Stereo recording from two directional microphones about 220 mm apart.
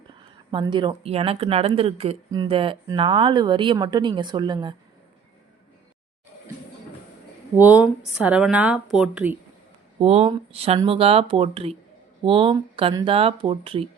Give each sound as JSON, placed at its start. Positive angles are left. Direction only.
{"t": 0.5, "sound": "speech", "side_deg": -20}
{"t": 7.5, "sound": "speech", "side_deg": -10}
{"t": 10.0, "sound": "speech", "side_deg": -30}